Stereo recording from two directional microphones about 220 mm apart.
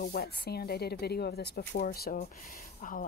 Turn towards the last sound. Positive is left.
turn(degrees=40)  # may be behind; listen again after turning